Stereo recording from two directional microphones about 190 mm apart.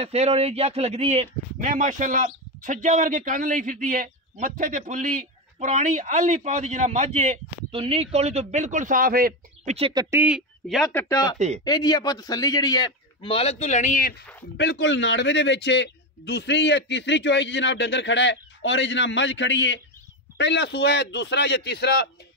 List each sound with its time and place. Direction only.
0.0 s speech: 35° right (ahead or behind); by 9.8 s 50° right (ahead or behind)
9.8 s speech: 30° right (ahead or behind)
10.1 s a man's voice: 5° right (ahead or behind)
10.9 s speech: 15° left (ahead or behind)
11.3 s speech: 35° right (ahead or behind)
11.6 s a man's voice: 20° left (ahead or behind); by 14.2 s 50° left (ahead or behind)
14.6 s a man's voice: 70° left (ahead or behind)